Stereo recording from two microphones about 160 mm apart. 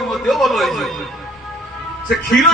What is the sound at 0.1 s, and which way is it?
Speech, centre (ahead or behind).